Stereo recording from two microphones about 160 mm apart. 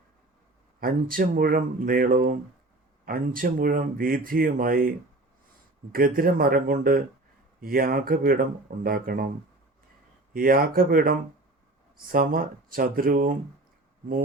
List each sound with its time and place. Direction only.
0.8 s speech: 65° right (ahead or behind)
5.9 s speech: 65° right (ahead or behind)
10.3 s speech: 65° right (ahead or behind)